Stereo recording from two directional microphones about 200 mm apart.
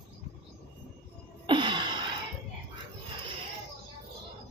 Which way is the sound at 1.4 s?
25° right (ahead or behind).